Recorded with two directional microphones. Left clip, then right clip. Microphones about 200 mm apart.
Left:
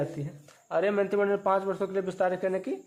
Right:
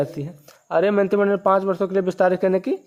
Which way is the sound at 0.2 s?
50° right (ahead or behind).